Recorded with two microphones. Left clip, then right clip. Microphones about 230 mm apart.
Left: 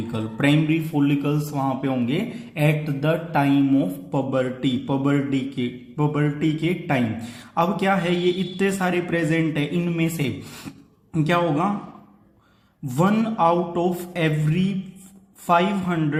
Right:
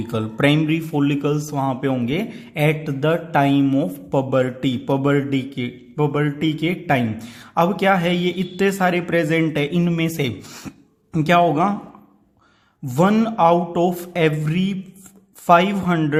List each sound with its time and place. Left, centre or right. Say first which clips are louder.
0.1 s a man's voice: right 3 dB; right
13.0 s a man's voice: right 4 dB; right